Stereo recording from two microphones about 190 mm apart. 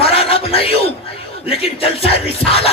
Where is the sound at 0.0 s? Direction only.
30° left (ahead or behind).